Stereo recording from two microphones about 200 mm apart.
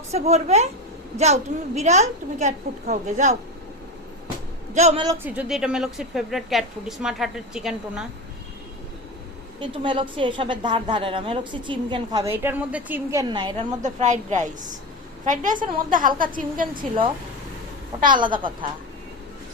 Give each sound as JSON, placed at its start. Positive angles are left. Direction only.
{"t": 0.1, "sound": "a woman's voice", "side_deg": -35}
{"t": 4.7, "sound": "a woman's voice", "side_deg": -35}
{"t": 5.0, "sound": "a woman's voice", "side_deg": -10}
{"t": 9.6, "sound": "a woman's voice", "side_deg": -25}
{"t": 13.8, "sound": "a woman's voice", "side_deg": -35}
{"t": 15.5, "sound": "a woman's voice", "side_deg": -25}
{"t": 15.9, "sound": "a woman's voice", "side_deg": -40}
{"t": 18.1, "sound": "a woman's voice", "side_deg": -25}